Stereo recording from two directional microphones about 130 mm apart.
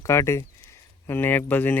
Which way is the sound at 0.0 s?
20° left (ahead or behind).